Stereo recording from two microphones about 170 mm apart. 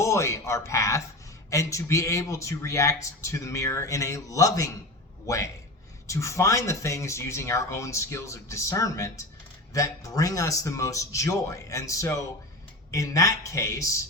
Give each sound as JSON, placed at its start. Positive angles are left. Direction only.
{"t": 0.0, "sound": "a man's voice", "side_deg": 15}